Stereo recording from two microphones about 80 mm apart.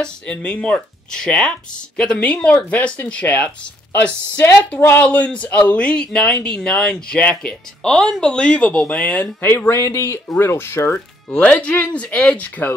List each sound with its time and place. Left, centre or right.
0.0 s speech: centre
5.0 s speech: centre
11.2 s speech: centre